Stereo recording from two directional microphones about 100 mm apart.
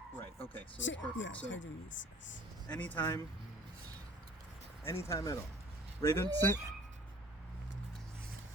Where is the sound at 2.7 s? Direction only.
15° left (ahead or behind).